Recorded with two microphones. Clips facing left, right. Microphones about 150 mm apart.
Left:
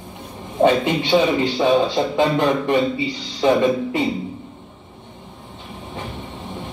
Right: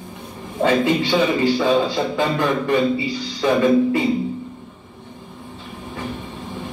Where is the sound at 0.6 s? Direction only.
20° left (ahead or behind).